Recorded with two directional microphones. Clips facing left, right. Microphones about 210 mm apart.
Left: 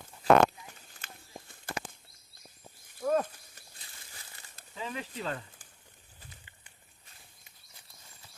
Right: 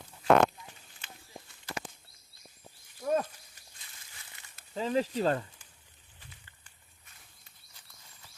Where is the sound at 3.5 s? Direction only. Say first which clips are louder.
Left 3 dB; 40° left (ahead or behind).